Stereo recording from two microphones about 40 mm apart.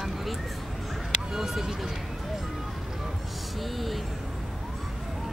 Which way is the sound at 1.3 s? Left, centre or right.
Centre.